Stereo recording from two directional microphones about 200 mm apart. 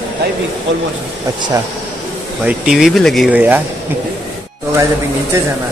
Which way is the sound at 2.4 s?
5° right (ahead or behind).